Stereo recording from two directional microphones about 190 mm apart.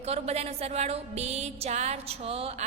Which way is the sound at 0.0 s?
35° right (ahead or behind).